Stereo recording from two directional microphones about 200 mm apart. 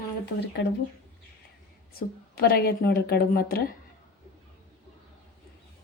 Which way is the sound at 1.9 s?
50° left (ahead or behind).